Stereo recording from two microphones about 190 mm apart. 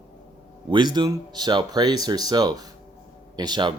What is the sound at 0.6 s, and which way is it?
Speech, 25° right (ahead or behind).